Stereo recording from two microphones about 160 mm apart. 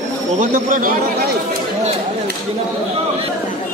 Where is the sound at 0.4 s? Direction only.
55° right (ahead or behind).